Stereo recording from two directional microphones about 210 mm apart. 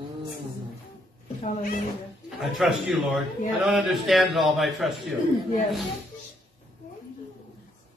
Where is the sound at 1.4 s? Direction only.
35° left (ahead or behind).